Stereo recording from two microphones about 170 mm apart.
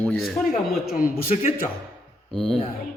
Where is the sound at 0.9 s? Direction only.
60° left (ahead or behind).